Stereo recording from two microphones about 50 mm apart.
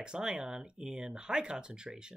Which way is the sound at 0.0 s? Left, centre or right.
Centre.